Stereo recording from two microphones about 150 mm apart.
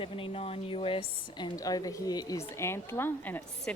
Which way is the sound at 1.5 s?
25° left (ahead or behind).